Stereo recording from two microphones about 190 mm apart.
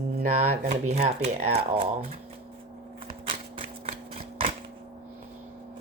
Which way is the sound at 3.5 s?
30° right (ahead or behind).